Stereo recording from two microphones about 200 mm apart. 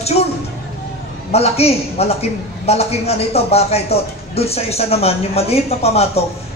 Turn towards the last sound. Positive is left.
turn(degrees=30)  # may be behind; listen again after turning